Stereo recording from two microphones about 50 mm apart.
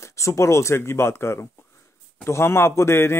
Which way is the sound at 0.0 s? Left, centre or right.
Left.